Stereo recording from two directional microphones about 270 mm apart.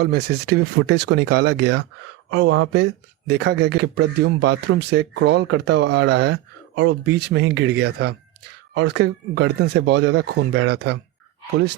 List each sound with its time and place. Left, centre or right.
0.0 s speech: right